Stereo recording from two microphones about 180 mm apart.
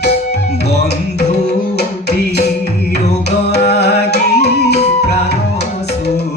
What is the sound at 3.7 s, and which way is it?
Music, 65° left (ahead or behind).